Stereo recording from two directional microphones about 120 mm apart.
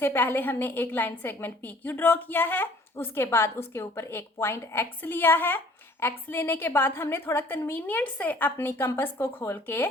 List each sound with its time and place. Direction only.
0.0 s a woman's voice: 15° left (ahead or behind)